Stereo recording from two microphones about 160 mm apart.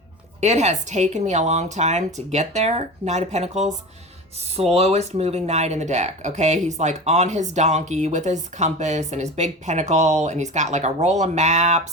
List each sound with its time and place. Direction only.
0.3 s speech: 45° right (ahead or behind)